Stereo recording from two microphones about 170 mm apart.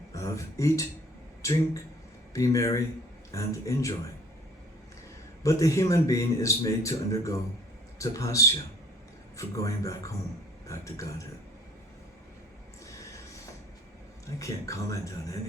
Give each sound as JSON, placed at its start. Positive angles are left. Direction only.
{"t": 0.1, "sound": "a man's voice", "side_deg": 20}
{"t": 5.4, "sound": "a man's voice", "side_deg": 20}
{"t": 12.8, "sound": "a sound", "side_deg": 20}
{"t": 14.3, "sound": "a man's voice", "side_deg": 20}